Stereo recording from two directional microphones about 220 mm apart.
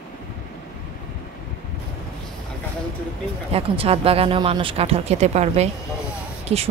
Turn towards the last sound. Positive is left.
turn(degrees=-25)  # may be behind; listen again after turning